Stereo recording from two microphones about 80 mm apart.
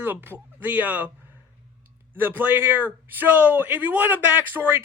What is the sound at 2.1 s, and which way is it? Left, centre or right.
A man's voice, right.